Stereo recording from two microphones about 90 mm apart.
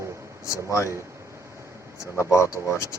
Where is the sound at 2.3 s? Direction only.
35° left (ahead or behind).